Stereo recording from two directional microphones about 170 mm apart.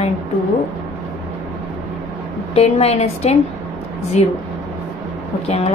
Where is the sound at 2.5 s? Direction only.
35° left (ahead or behind).